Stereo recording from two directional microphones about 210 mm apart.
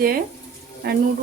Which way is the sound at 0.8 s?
45° right (ahead or behind).